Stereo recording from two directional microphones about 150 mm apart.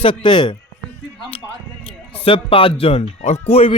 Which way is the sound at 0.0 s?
30° left (ahead or behind).